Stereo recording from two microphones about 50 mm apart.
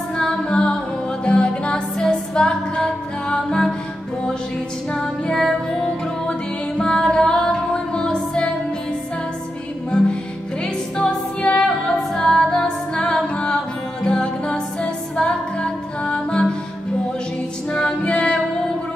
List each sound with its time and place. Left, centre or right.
0.4 s music: centre
4.9 s music: centre
5.7 s music: centre
9.8 s music: centre
11.5 s music: centre
17.6 s music: centre